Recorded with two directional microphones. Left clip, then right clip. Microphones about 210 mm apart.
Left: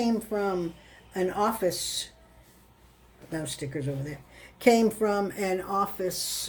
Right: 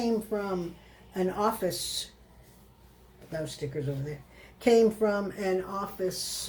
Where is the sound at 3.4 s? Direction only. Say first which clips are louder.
Right 1 dB; 55° left (ahead or behind).